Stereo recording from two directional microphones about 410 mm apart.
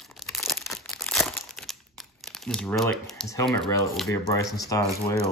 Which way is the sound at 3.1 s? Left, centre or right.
Centre.